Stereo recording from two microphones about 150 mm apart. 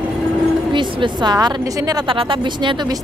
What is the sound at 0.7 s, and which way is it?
Speech, 30° right (ahead or behind).